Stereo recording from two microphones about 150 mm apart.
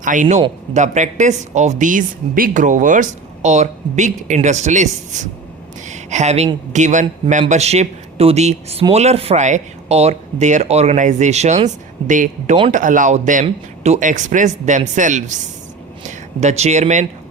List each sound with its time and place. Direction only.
0.0 s speech: 60° right (ahead or behind)
1.8 s speech: 60° right (ahead or behind)